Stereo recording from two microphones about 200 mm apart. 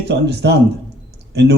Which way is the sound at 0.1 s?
55° right (ahead or behind).